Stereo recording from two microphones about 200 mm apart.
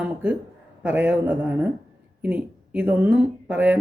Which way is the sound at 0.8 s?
10° right (ahead or behind).